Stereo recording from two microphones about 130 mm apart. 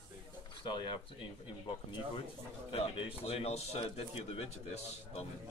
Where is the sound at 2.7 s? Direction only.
45° left (ahead or behind).